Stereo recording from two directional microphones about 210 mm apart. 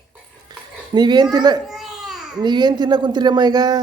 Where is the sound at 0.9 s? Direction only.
20° right (ahead or behind).